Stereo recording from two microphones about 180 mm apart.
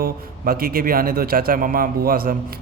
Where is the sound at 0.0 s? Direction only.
55° right (ahead or behind).